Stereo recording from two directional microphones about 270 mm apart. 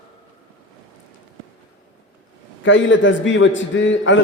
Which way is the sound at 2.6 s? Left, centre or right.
Left.